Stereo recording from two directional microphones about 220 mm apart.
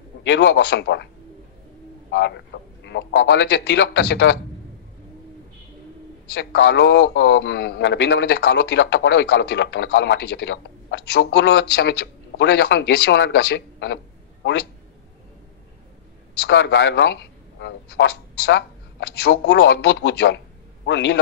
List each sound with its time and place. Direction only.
0.2 s a man's voice: 55° left (ahead or behind)
2.0 s a man's voice: 50° left (ahead or behind)
6.5 s a man's voice: 50° left (ahead or behind)
16.4 s a man's voice: 50° left (ahead or behind)